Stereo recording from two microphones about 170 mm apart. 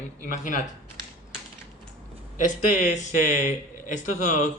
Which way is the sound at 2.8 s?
50° left (ahead or behind).